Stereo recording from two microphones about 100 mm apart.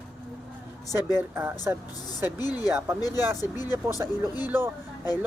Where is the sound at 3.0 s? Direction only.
40° left (ahead or behind).